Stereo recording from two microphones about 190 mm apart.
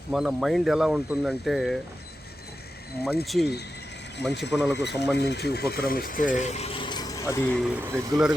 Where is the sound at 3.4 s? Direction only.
60° left (ahead or behind).